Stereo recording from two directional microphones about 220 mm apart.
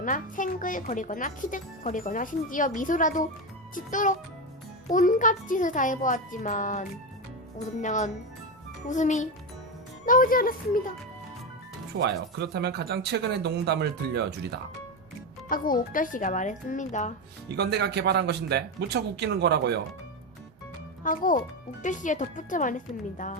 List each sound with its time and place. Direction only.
0.0 s speech: 35° left (ahead or behind)
11.9 s speech: 50° right (ahead or behind)
15.4 s speech: 40° left (ahead or behind)
17.5 s speech: 50° right (ahead or behind)
21.0 s speech: 35° left (ahead or behind)